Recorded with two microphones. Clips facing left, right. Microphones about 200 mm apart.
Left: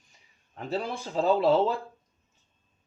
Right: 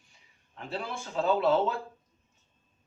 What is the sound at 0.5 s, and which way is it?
Speech, 40° left (ahead or behind).